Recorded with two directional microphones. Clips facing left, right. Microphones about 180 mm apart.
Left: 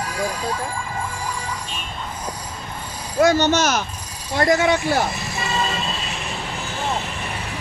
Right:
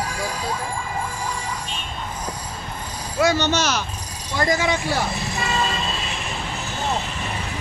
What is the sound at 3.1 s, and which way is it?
Speech, 50° left (ahead or behind).